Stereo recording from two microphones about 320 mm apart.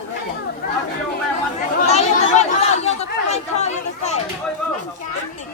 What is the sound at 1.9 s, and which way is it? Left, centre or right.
Chatter, centre.